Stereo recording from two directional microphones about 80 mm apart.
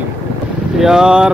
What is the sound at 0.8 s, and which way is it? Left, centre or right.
Speech, centre.